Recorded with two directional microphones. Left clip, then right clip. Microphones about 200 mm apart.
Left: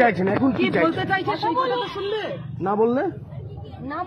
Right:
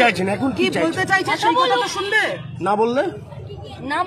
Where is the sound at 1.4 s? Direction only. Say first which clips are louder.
Right 6 dB; 25° right (ahead or behind).